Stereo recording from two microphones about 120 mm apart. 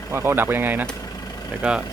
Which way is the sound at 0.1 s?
20° right (ahead or behind).